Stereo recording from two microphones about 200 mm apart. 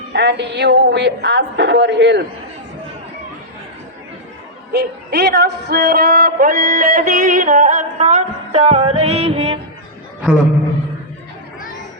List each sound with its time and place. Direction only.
0.1 s speech: 60° right (ahead or behind)
4.7 s speech: 55° right (ahead or behind); by 9.6 s 30° right (ahead or behind)